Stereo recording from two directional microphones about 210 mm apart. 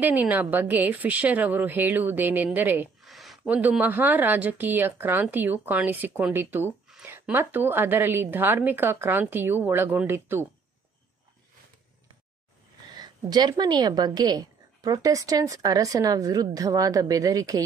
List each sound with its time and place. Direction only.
0.0 s a woman's voice: 10° right (ahead or behind)
12.9 s a woman's voice: 20° right (ahead or behind)